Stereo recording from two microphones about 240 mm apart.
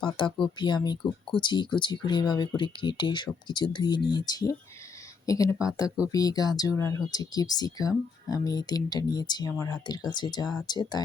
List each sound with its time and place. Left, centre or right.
0.4 s speech: centre